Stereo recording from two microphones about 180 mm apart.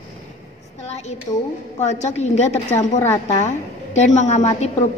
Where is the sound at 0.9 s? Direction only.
40° left (ahead or behind).